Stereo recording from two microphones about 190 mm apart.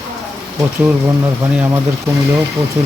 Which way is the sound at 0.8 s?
15° right (ahead or behind).